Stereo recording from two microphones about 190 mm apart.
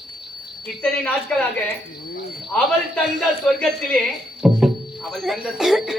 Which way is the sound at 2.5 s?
5° left (ahead or behind).